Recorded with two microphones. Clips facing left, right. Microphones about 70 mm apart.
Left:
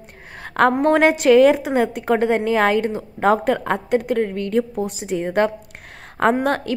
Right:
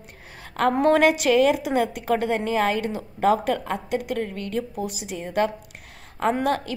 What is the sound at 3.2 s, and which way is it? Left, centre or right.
A woman's voice, left.